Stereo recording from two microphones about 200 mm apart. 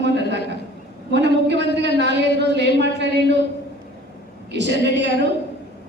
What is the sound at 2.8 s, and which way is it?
Speech, 60° right (ahead or behind).